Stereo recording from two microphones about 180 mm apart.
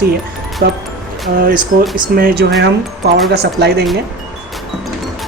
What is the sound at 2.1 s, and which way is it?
Speech, 60° right (ahead or behind).